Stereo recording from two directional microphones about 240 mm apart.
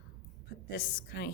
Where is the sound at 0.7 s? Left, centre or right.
Left.